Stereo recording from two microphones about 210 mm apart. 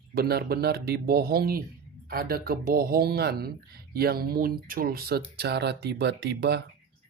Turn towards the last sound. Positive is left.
turn(degrees=-50)  # may be behind; listen again after turning